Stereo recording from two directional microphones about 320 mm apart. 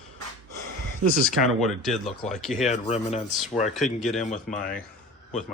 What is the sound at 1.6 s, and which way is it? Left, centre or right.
A man's voice, centre.